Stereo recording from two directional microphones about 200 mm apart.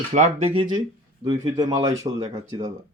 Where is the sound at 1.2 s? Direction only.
20° right (ahead or behind).